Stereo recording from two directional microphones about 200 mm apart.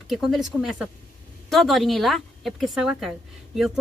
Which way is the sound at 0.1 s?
Centre (ahead or behind).